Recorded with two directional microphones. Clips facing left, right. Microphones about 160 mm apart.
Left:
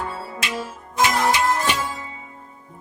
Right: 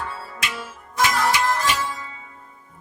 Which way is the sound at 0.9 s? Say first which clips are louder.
Left 1 dB; 25° left (ahead or behind).